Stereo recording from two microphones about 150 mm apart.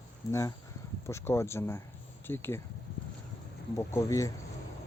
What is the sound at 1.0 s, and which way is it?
Speech, 20° left (ahead or behind).